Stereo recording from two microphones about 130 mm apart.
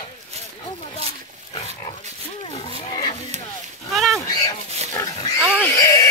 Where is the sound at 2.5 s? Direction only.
35° left (ahead or behind).